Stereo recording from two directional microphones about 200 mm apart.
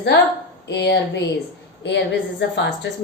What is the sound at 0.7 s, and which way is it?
Speech, 60° left (ahead or behind).